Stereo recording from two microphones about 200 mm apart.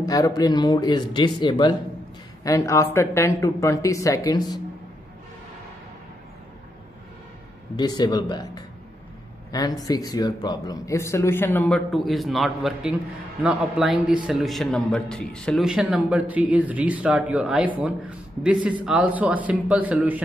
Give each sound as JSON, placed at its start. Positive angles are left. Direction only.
{"t": 0.0, "sound": "speech", "side_deg": 20}
{"t": 7.7, "sound": "a man's voice", "side_deg": 20}